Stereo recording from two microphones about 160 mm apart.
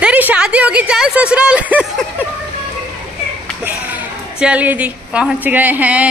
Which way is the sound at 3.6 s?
10° right (ahead or behind).